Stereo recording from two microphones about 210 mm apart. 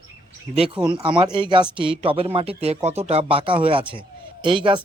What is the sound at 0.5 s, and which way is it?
Speech, 25° right (ahead or behind).